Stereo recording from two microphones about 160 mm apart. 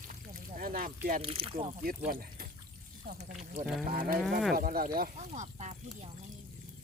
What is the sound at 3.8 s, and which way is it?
Speech, 65° right (ahead or behind).